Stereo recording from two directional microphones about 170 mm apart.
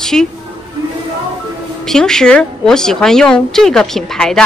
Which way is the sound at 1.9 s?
5° left (ahead or behind).